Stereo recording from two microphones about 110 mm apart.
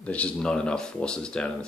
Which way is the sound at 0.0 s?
10° left (ahead or behind).